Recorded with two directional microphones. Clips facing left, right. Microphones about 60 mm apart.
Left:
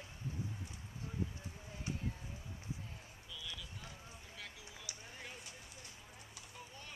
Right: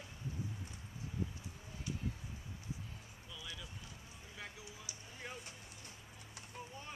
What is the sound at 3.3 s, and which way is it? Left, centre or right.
Vehicle, right.